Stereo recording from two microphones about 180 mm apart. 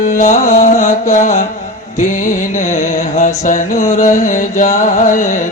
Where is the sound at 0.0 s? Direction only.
45° left (ahead or behind).